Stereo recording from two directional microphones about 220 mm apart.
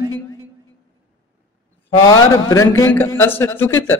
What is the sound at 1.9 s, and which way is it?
Speech, 15° left (ahead or behind).